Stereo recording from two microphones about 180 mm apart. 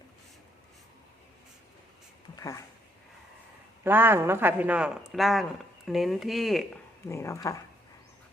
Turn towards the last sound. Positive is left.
turn(degrees=15)  # may be behind; listen again after turning